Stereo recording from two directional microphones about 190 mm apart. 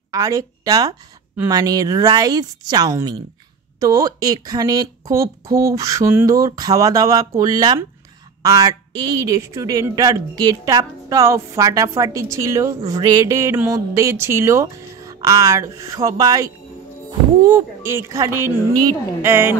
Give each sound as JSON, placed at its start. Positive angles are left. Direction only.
{"t": 0.1, "sound": "a woman's voice", "side_deg": -15}